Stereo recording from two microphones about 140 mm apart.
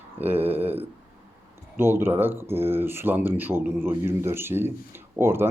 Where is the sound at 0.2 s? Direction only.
15° right (ahead or behind).